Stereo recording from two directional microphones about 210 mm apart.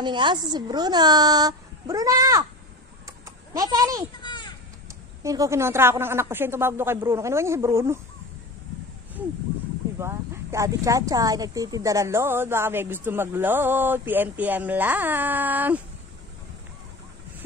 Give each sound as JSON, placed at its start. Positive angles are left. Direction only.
{"t": 0.0, "sound": "a woman's voice", "side_deg": -20}
{"t": 3.1, "sound": "typing", "side_deg": -15}
{"t": 4.2, "sound": "children playing", "side_deg": 20}
{"t": 5.2, "sound": "speech", "side_deg": -15}
{"t": 9.9, "sound": "speech", "side_deg": -15}